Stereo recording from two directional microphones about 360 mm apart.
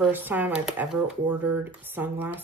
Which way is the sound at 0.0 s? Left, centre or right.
Centre.